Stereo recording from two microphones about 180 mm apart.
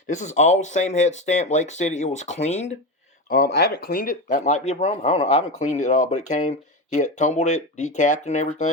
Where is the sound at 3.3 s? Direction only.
55° left (ahead or behind).